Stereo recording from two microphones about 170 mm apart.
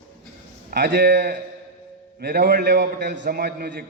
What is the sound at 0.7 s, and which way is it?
A man's voice, 70° right (ahead or behind).